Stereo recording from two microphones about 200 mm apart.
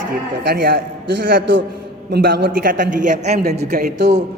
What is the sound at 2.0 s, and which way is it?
A man's voice, 50° right (ahead or behind).